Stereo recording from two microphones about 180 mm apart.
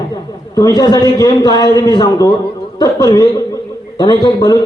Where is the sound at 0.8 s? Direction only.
20° left (ahead or behind).